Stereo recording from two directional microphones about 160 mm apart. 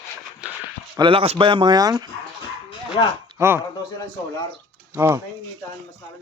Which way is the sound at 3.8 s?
25° left (ahead or behind).